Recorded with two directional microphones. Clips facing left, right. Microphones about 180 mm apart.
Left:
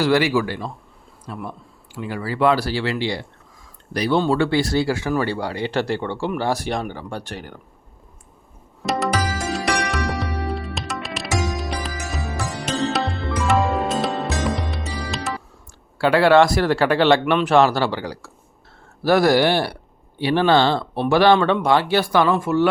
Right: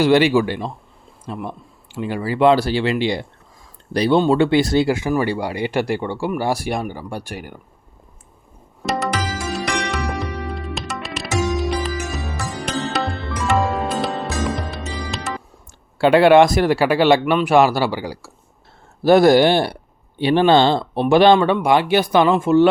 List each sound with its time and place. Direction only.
0.0 s speech: 25° right (ahead or behind)
8.8 s tabla: centre (ahead or behind)
9.5 s music: centre (ahead or behind)
16.0 s speech: 20° right (ahead or behind)
19.0 s speech: 25° right (ahead or behind)